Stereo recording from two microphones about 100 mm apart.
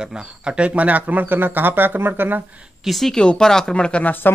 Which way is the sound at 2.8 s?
Centre (ahead or behind).